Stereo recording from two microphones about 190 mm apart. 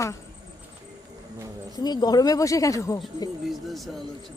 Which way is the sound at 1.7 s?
20° left (ahead or behind).